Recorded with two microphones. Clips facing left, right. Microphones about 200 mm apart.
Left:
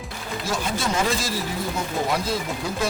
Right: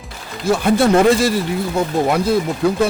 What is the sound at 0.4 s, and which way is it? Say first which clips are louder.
Speech: right 13 dB; 60° right (ahead or behind).